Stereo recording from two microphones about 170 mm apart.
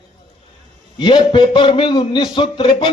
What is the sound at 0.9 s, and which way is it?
A man's voice, 30° left (ahead or behind).